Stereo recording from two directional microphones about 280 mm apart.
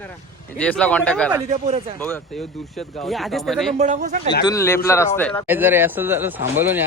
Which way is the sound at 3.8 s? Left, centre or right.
Right.